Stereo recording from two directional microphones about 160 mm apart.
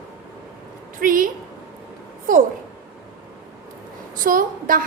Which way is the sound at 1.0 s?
60° right (ahead or behind).